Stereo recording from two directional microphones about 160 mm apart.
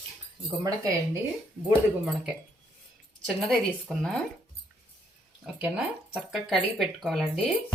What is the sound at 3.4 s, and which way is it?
Speech, centre (ahead or behind).